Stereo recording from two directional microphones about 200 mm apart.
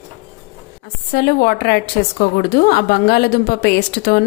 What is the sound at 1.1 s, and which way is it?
A woman's voice, 50° left (ahead or behind).